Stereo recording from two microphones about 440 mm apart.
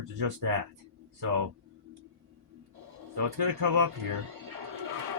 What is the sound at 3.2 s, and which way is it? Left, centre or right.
Speech, right.